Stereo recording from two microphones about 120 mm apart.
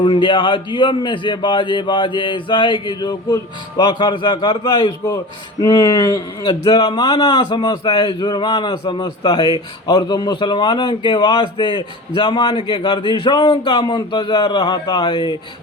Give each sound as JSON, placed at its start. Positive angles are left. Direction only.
{"t": 0.0, "sound": "speech", "side_deg": 45}